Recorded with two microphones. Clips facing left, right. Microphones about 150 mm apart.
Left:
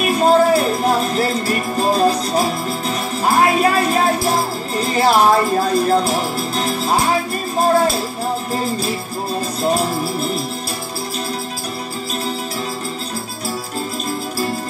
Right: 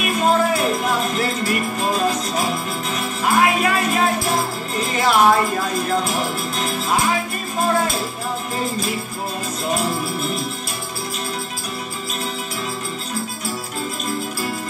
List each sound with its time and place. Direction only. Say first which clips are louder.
0.0 s music: left 5 dB; 35° left (ahead or behind)
9.6 s music: left 4 dB; 35° left (ahead or behind)